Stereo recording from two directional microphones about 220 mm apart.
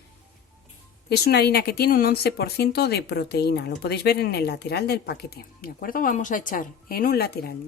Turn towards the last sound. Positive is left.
turn(degrees=45)  # may be behind; listen again after turning